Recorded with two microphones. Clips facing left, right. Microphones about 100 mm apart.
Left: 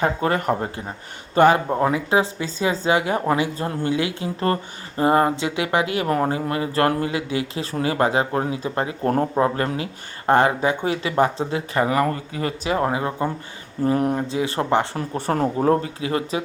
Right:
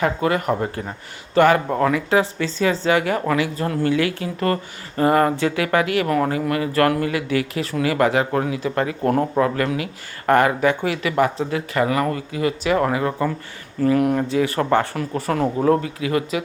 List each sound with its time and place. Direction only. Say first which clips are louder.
0.0 s speech: right 1 dB; 35° left (ahead or behind)
1.4 s speech: even; 25° left (ahead or behind)